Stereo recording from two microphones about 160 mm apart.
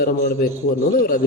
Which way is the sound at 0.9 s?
60° left (ahead or behind).